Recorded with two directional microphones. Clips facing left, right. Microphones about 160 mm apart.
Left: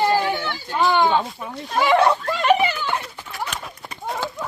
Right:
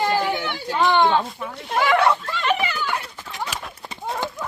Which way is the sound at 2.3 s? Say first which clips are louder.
Left 5 dB; 40° left (ahead or behind).